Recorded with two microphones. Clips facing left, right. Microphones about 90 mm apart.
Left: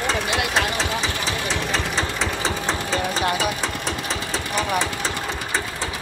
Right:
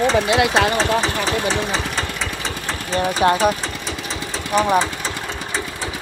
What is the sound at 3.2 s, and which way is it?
Speech, 30° right (ahead or behind).